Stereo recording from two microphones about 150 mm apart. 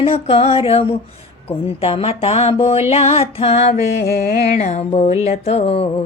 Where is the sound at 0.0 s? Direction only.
40° left (ahead or behind).